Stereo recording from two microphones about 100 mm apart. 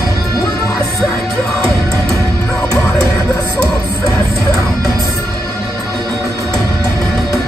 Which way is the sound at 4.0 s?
25° left (ahead or behind).